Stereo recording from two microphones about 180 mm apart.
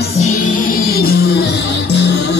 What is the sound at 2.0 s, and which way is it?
Music, 70° left (ahead or behind).